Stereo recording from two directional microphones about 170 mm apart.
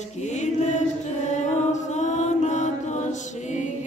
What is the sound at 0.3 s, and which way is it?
Music, 45° left (ahead or behind).